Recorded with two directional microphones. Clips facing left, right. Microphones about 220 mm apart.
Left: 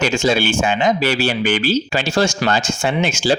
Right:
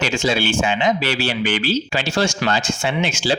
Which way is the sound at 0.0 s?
45° left (ahead or behind).